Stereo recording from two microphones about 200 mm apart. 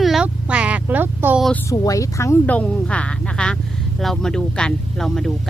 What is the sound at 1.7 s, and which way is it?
Speech, 15° left (ahead or behind).